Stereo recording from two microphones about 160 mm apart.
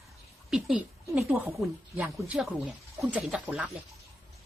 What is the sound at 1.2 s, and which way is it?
Speech, 15° right (ahead or behind).